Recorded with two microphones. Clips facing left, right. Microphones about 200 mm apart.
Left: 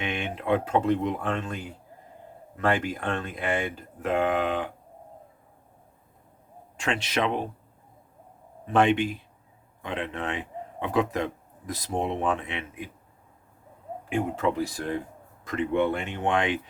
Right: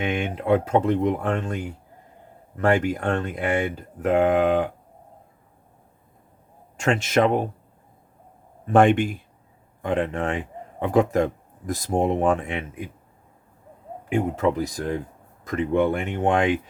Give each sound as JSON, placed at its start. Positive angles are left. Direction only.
{"t": 0.0, "sound": "speech", "side_deg": -45}
{"t": 2.6, "sound": "speech", "side_deg": -45}
{"t": 6.7, "sound": "speech", "side_deg": -45}
{"t": 8.6, "sound": "a man's voice", "side_deg": -50}
{"t": 14.1, "sound": "speech", "side_deg": -40}